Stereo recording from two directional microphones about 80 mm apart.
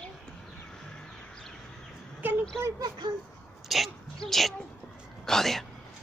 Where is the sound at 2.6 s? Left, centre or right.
Right.